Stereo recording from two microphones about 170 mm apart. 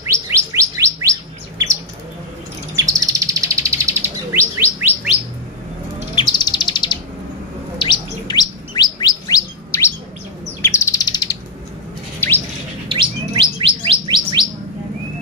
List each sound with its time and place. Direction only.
0.1 s bird: 15° right (ahead or behind)
2.7 s bird: 20° right (ahead or behind)
6.1 s bird: 25° left (ahead or behind)
7.8 s chirp: 25° left (ahead or behind)
10.6 s bird: 15° left (ahead or behind)
12.2 s chirp tone: 10° left (ahead or behind)
12.8 s bird: 30° right (ahead or behind)